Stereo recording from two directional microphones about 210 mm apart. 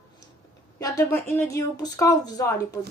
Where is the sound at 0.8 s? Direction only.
15° left (ahead or behind).